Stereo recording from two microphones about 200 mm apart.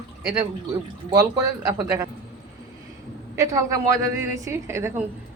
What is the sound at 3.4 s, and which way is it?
A woman's voice, 15° right (ahead or behind).